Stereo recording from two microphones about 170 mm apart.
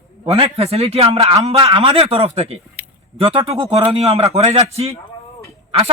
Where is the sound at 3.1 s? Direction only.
35° right (ahead or behind).